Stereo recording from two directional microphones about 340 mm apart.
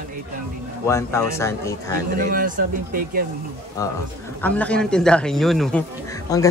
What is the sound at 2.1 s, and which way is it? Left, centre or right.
Speech, right.